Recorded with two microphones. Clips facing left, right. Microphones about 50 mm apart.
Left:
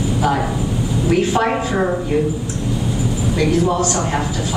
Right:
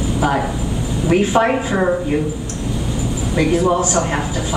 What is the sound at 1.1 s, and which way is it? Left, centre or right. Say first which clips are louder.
Speech: right 2 dB; centre.